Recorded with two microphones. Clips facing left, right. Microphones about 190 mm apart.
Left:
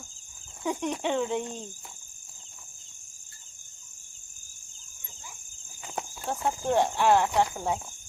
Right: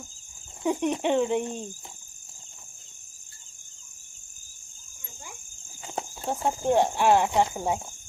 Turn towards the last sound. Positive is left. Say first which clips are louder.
# right 2 dB
turn(degrees=-15)  # may be behind; listen again after turning